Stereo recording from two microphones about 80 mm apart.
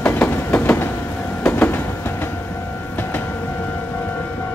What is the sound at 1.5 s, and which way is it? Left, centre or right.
Vehicle, left.